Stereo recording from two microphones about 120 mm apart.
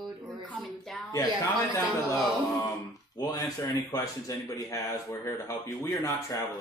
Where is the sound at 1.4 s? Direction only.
25° left (ahead or behind).